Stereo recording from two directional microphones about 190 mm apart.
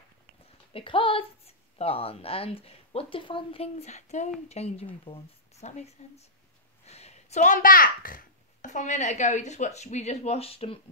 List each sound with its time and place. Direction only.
0.7 s a woman's voice: 30° left (ahead or behind)